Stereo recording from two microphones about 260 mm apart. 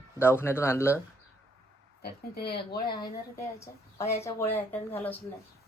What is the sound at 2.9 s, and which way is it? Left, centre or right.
Speech, centre.